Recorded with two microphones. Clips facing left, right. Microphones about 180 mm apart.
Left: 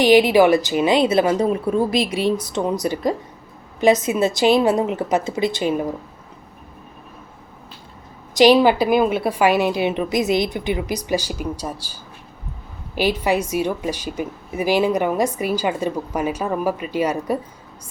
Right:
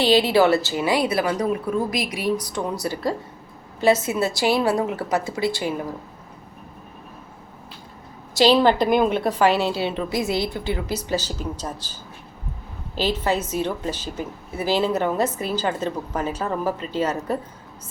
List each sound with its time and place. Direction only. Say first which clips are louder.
0.0 s speech: left 4 dB; 15° left (ahead or behind)
8.4 s a woman's voice: left 3 dB; 15° left (ahead or behind)
13.0 s a woman's voice: left 3 dB; 15° left (ahead or behind)